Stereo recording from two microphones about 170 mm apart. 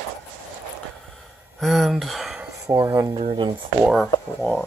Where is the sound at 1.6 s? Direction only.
Centre (ahead or behind).